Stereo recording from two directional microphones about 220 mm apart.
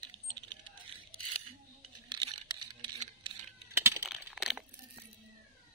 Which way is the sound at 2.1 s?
20° right (ahead or behind).